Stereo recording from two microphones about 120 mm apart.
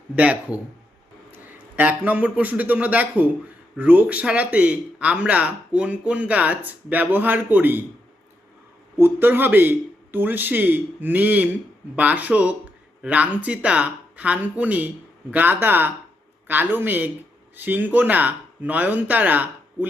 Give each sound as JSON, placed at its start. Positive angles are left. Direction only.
{"t": 0.2, "sound": "speech", "side_deg": -10}
{"t": 1.7, "sound": "speech", "side_deg": -15}
{"t": 9.0, "sound": "speech", "side_deg": -15}